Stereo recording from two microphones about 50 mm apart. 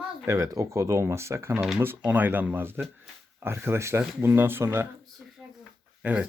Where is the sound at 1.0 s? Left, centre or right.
Right.